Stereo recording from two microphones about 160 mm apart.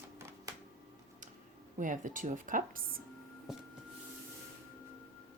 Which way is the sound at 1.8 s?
55° right (ahead or behind).